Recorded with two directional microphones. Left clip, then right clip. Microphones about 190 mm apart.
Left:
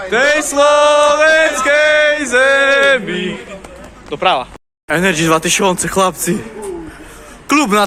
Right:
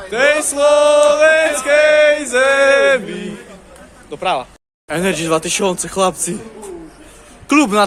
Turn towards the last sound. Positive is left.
turn(degrees=0)  # may be behind; listen again after turning